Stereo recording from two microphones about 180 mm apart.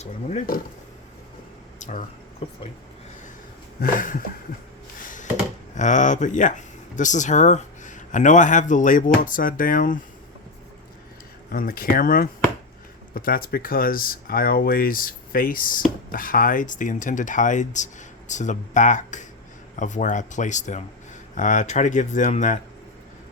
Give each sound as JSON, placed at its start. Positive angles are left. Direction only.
{"t": 0.0, "sound": "speech", "side_deg": 40}
{"t": 1.8, "sound": "speech", "side_deg": 40}
{"t": 3.8, "sound": "speech", "side_deg": 50}
{"t": 5.0, "sound": "a sound", "side_deg": 45}
{"t": 5.7, "sound": "speech", "side_deg": 40}
{"t": 11.5, "sound": "speech", "side_deg": 50}